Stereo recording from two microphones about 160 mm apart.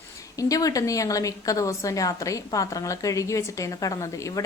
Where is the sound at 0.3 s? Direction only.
20° left (ahead or behind).